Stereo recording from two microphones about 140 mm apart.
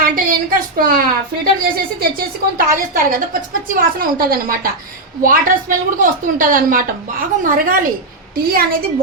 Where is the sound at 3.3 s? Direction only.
85° right.